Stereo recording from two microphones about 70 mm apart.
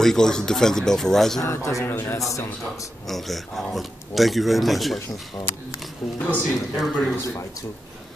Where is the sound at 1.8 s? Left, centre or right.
Left.